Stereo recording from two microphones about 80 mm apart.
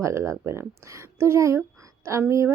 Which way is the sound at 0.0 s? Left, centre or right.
Right.